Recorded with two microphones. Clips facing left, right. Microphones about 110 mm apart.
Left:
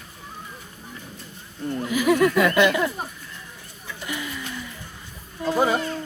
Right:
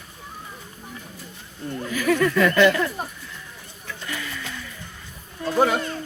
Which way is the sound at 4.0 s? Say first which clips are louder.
Left 2 dB; 20° left (ahead or behind).